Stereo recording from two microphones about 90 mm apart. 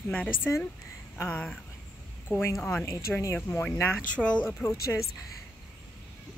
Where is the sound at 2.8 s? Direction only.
30° left (ahead or behind).